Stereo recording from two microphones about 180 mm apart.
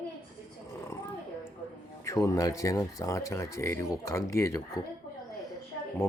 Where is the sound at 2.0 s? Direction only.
15° left (ahead or behind).